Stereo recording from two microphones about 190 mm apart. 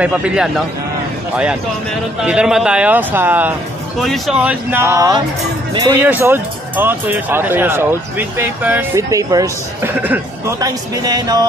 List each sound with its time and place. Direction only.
0.0 s a man's voice: 5° right (ahead or behind)
2.2 s speech: 5° right (ahead or behind); by 11.4 s 20° right (ahead or behind)